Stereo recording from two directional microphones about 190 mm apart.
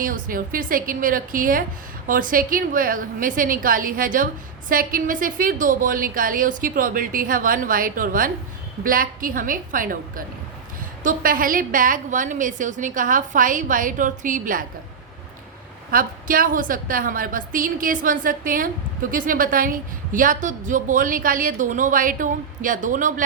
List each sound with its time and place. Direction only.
0.0 s a woman's voice: 45° right (ahead or behind)
15.9 s a woman's voice: 50° right (ahead or behind)